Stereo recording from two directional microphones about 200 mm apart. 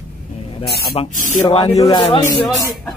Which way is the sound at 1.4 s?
20° left (ahead or behind).